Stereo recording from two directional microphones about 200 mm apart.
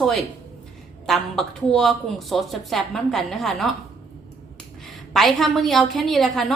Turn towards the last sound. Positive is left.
turn(degrees=0)  # may be behind; listen again after turning